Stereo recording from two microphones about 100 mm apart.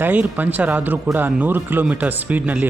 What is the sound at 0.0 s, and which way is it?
Speech, 15° right (ahead or behind).